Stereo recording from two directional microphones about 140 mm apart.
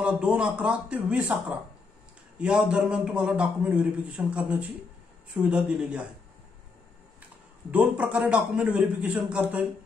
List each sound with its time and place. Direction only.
0.0 s a man's voice: 10° right (ahead or behind)
7.7 s a man's voice: 10° right (ahead or behind)